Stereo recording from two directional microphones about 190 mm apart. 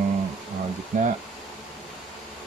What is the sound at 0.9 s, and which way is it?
Speech, 40° right (ahead or behind).